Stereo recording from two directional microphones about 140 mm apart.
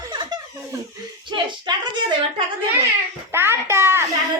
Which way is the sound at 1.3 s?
35° right (ahead or behind).